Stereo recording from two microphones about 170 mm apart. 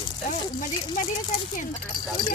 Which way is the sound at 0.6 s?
45° left (ahead or behind).